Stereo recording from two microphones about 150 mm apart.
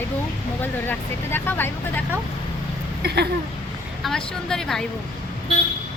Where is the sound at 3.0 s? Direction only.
90° right.